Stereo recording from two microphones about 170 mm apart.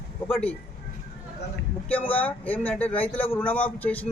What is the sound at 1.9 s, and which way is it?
Speech, 10° left (ahead or behind).